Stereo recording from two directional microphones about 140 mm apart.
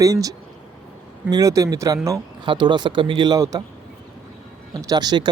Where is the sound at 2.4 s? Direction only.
35° right (ahead or behind).